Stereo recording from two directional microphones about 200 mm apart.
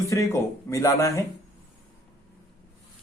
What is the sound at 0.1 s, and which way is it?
Speech, 15° left (ahead or behind).